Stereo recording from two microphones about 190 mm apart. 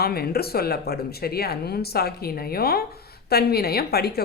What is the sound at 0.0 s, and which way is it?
Speech, 55° left (ahead or behind).